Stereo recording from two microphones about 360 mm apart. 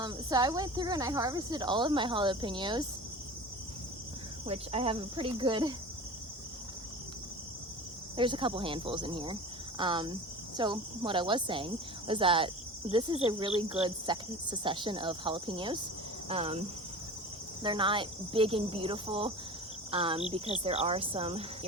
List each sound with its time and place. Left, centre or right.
0.0 s speech: centre
4.4 s speech: centre
8.1 s speech: centre